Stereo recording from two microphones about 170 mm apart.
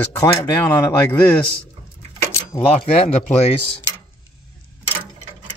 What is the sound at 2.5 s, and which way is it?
Speech, 35° left (ahead or behind).